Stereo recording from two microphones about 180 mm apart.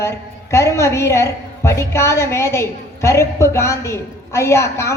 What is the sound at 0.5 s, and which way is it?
A woman's voice, 15° left (ahead or behind).